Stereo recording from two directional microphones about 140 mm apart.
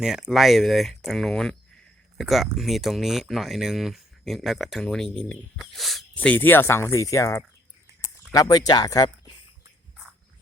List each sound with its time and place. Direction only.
0.0 s speech: 5° right (ahead or behind)
6.1 s speech: 10° left (ahead or behind); by 9.3 s 30° left (ahead or behind)